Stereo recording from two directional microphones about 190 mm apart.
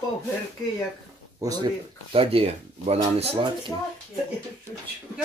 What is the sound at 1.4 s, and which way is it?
Speech, 20° right (ahead or behind).